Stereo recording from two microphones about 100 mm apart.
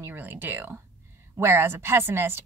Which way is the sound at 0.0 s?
20° right (ahead or behind).